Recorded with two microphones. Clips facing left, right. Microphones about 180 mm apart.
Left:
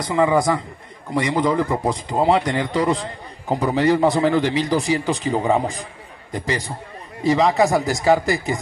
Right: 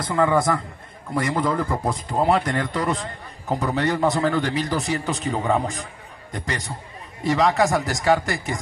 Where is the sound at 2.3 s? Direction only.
Centre (ahead or behind).